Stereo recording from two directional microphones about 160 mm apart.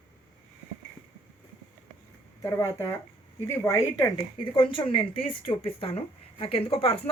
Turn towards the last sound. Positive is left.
turn(degrees=35)  # may be behind; listen again after turning